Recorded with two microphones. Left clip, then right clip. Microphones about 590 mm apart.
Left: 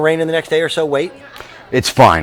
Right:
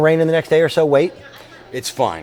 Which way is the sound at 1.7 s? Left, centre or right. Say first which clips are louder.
Left 10 dB; left.